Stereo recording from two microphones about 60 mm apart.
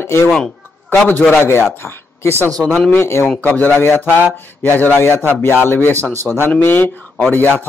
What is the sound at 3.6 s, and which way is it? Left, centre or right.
Speech, left.